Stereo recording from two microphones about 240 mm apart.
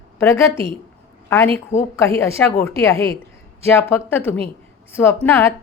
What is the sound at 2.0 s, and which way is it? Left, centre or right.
A woman's voice, centre.